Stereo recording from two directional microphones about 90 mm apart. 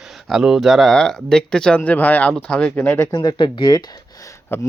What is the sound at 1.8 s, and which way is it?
Speech, 20° left (ahead or behind).